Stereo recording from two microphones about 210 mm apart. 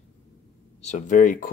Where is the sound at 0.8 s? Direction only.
35° left (ahead or behind).